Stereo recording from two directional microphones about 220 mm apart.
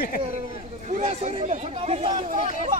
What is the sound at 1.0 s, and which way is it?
Chatter, 30° right (ahead or behind).